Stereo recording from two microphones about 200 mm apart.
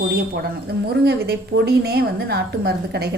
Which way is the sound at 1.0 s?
55° right (ahead or behind).